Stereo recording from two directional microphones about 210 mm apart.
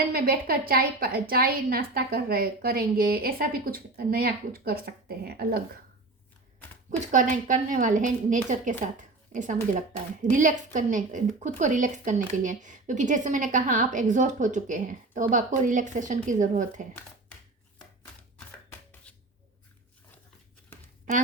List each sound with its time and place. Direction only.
0.1 s a woman's voice: 45° right (ahead or behind)
7.1 s a woman's voice: 40° right (ahead or behind)
19.1 s a sound: 5° left (ahead or behind)